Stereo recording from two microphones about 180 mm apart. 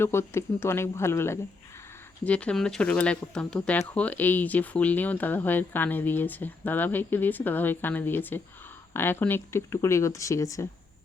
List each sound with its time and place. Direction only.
0.0 s speech: 15° left (ahead or behind)